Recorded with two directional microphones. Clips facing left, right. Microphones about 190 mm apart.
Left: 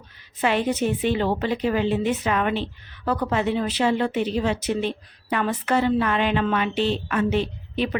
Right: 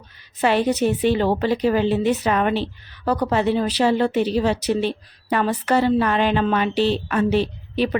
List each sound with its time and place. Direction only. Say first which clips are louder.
0.4 s a woman's voice: right 4 dB; 35° right (ahead or behind)